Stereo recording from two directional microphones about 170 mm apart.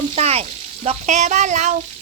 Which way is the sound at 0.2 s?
35° right (ahead or behind).